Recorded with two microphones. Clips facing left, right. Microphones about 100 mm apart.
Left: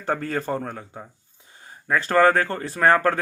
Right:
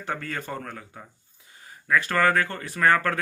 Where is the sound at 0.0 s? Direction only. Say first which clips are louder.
Left 6 dB; 35° left (ahead or behind).